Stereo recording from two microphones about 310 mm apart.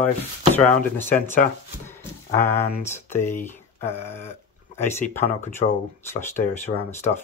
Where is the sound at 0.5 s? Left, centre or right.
Centre.